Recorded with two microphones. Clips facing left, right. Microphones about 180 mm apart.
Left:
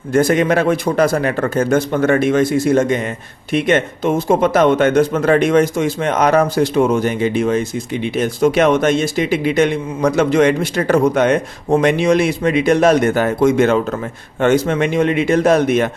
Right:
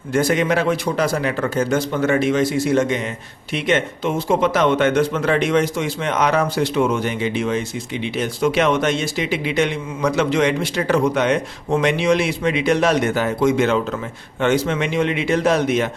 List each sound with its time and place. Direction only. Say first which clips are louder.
0.1 s speech: left 4 dB; 50° left (ahead or behind)